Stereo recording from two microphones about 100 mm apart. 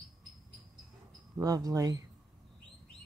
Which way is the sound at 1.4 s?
40° right (ahead or behind).